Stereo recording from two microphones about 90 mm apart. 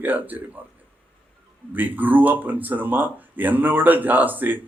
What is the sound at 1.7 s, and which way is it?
A man's voice, 20° right (ahead or behind).